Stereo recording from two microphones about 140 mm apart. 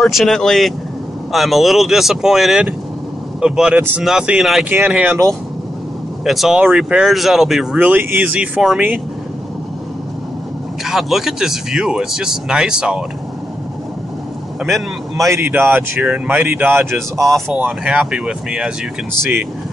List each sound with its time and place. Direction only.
0.0 s speech: centre (ahead or behind)
10.8 s speech: centre (ahead or behind)
14.6 s a man's voice: centre (ahead or behind)
15.2 s speech: 20° right (ahead or behind)
15.6 s speech: 5° right (ahead or behind)
16.3 s speech: 15° right (ahead or behind)
17.2 s speech: centre (ahead or behind)